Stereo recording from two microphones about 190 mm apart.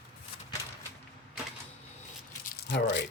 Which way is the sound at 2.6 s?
65° left (ahead or behind).